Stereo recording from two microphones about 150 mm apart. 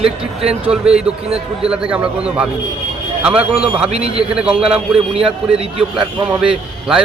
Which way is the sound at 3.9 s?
40° right (ahead or behind).